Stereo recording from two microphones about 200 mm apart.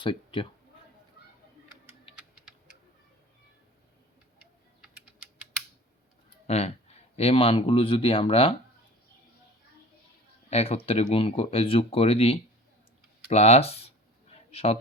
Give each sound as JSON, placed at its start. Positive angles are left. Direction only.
{"t": 0.0, "sound": "speech", "side_deg": 25}
{"t": 1.2, "sound": "a sound", "side_deg": 55}
{"t": 2.1, "sound": "music", "side_deg": 25}
{"t": 6.5, "sound": "speech", "side_deg": 30}
{"t": 10.5, "sound": "a man's voice", "side_deg": 30}